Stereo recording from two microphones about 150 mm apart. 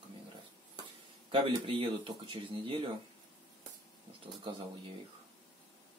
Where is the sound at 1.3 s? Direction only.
35° right (ahead or behind).